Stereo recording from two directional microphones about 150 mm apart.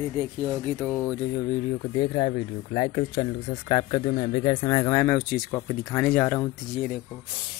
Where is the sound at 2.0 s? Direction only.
35° left (ahead or behind).